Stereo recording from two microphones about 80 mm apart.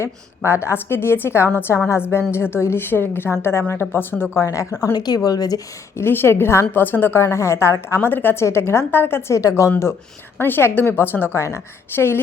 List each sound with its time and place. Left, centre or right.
0.0 s a woman's voice: left
4.4 s a woman's voice: left
4.9 s speech: left
6.0 s a woman's voice: left
10.3 s a woman's voice: left